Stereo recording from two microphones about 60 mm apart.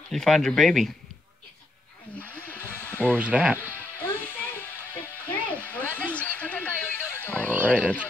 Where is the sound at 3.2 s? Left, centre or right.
Centre.